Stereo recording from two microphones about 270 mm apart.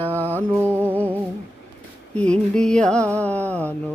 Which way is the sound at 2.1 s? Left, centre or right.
Centre.